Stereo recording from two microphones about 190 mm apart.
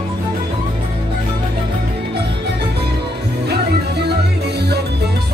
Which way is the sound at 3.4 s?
60° right (ahead or behind).